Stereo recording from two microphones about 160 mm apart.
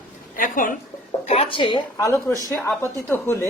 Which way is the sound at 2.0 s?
15° left (ahead or behind).